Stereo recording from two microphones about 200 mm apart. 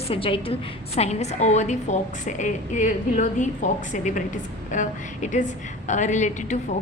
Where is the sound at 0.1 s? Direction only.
25° left (ahead or behind).